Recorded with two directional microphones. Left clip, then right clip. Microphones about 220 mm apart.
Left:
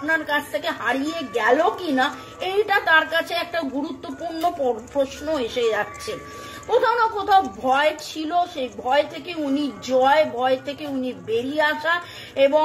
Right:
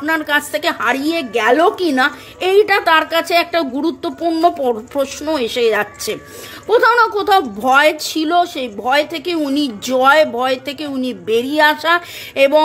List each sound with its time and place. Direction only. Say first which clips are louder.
0.0 s a woman's voice: right 6 dB; 50° right (ahead or behind)